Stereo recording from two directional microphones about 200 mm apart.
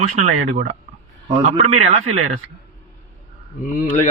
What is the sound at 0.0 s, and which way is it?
A man's voice, 35° right (ahead or behind).